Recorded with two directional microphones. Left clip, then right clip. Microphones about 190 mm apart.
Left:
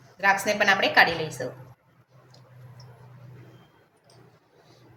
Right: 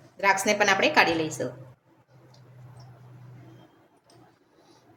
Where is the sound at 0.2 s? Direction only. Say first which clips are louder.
Even; 50° right (ahead or behind).